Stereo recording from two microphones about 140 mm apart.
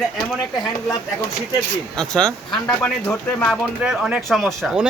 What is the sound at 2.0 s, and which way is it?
Speech, 5° left (ahead or behind).